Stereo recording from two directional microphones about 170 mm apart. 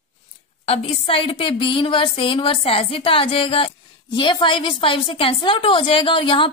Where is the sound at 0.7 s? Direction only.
30° left (ahead or behind).